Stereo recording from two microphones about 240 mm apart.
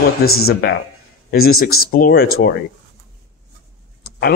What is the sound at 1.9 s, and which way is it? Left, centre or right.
Speech, left.